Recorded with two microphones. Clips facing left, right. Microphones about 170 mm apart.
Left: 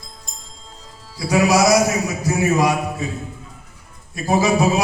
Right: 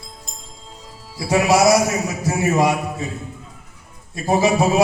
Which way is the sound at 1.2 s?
25° right (ahead or behind).